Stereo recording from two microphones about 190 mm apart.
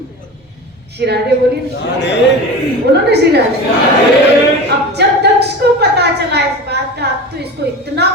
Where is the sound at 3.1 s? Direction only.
60° right (ahead or behind).